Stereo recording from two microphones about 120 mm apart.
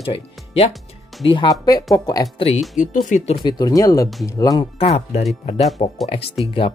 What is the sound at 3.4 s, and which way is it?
Speech, 35° left (ahead or behind).